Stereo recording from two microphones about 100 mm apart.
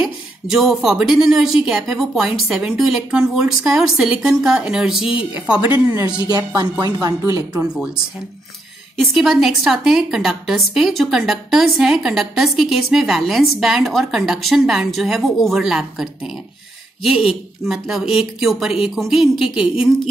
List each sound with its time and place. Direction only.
0.0 s a woman's voice: 5° right (ahead or behind)
6.2 s speech: 40° right (ahead or behind)
8.9 s a woman's voice: centre (ahead or behind)